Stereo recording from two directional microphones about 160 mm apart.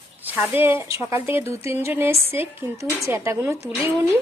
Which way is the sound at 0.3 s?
10° right (ahead or behind).